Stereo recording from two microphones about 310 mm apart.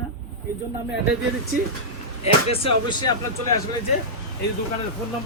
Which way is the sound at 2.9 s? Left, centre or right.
Centre.